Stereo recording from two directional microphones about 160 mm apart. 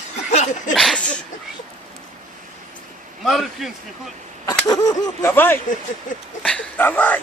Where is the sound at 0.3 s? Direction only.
45° left (ahead or behind).